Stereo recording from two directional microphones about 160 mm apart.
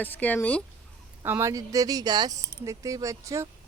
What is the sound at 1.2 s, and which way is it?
Speech, 15° right (ahead or behind).